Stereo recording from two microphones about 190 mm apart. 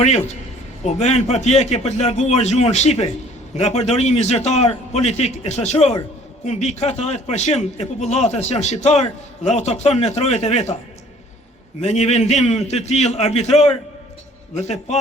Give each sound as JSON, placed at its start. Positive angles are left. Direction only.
{"t": 0.0, "sound": "speech", "side_deg": 35}
{"t": 11.8, "sound": "speech", "side_deg": 35}